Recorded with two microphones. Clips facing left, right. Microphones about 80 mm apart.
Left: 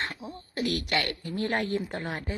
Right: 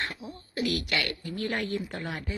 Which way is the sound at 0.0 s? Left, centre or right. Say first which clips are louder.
Left 1 dB; left.